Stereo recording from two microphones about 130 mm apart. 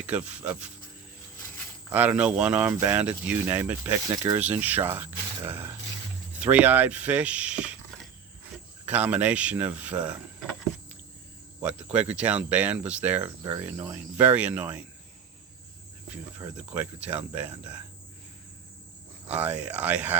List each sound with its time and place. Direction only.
0.1 s speech: 10° right (ahead or behind)
1.9 s speech: 10° right (ahead or behind)
3.9 s speech: 25° right (ahead or behind)
4.4 s speech: 15° right (ahead or behind)
8.9 s speech: 10° right (ahead or behind)
11.6 s speech: 10° right (ahead or behind)
16.6 s speech: 10° right (ahead or behind)
19.3 s speech: 10° right (ahead or behind)